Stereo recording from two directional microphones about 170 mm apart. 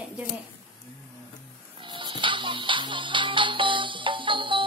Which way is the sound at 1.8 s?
30° right (ahead or behind).